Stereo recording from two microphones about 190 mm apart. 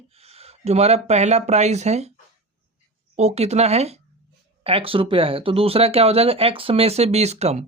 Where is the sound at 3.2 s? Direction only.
35° right (ahead or behind).